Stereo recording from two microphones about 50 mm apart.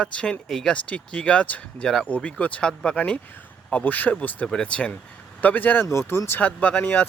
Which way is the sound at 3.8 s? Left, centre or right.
Left.